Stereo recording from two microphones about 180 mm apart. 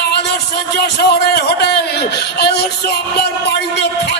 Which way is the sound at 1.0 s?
65° left (ahead or behind).